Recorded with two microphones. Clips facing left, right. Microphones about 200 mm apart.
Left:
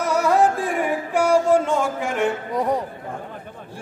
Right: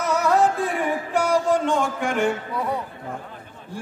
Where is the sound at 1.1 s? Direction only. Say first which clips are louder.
Left 4 dB; 10° left (ahead or behind).